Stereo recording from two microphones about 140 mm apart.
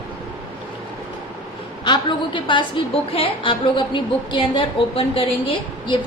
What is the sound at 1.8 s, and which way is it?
A woman's voice, 35° left (ahead or behind).